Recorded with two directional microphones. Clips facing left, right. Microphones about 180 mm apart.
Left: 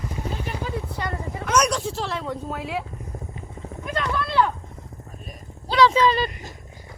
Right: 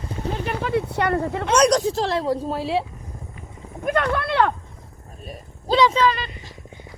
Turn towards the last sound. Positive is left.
turn(degrees=40)  # may be behind; listen again after turning